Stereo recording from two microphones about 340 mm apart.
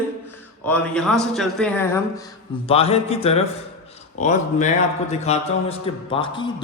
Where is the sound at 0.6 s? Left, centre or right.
Centre.